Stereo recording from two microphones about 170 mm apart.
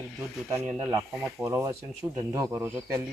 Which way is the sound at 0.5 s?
15° right (ahead or behind).